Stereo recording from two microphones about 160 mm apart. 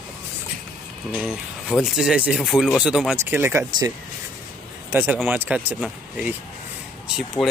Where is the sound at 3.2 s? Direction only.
15° right (ahead or behind).